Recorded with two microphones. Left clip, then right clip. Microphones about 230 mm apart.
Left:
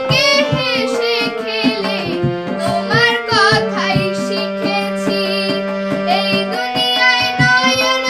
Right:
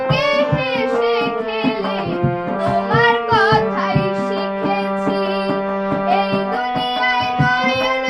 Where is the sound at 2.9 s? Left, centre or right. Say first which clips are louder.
Left 1 dB; left.